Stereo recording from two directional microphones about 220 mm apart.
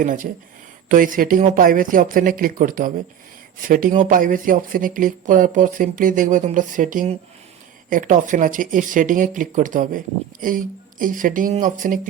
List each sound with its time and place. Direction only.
0.0 s speech: 35° right (ahead or behind)